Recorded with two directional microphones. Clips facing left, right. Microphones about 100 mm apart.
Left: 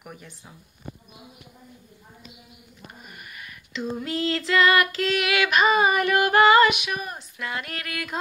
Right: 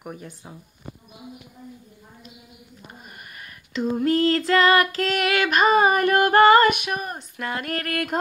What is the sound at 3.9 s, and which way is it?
Female singing, 45° right (ahead or behind).